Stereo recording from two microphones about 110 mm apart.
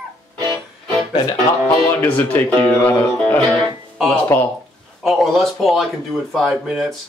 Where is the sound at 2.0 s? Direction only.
15° left (ahead or behind).